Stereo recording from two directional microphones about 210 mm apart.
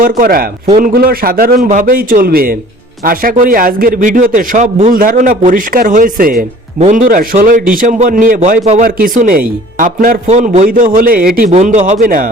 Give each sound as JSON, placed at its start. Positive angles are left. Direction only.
{"t": 0.0, "sound": "a man's voice", "side_deg": -40}
{"t": 11.5, "sound": "speech", "side_deg": -35}